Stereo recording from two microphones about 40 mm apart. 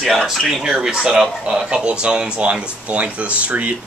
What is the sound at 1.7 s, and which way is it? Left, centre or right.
Speech, right.